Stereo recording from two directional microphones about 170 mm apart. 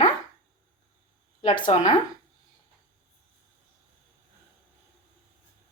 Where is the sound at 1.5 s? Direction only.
45° left (ahead or behind).